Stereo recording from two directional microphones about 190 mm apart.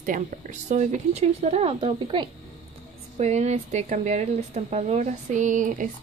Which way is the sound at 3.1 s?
35° right (ahead or behind).